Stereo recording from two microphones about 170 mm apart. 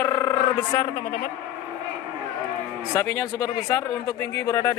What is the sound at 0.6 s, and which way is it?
Speech, 30° left (ahead or behind).